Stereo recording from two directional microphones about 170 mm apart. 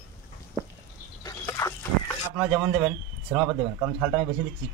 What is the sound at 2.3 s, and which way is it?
Speech, 5° right (ahead or behind).